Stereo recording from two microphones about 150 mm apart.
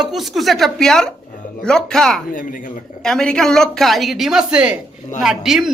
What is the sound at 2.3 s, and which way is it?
Speech, 60° left (ahead or behind).